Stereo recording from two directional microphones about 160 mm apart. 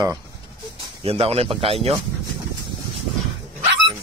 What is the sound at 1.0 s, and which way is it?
Speech, 40° right (ahead or behind).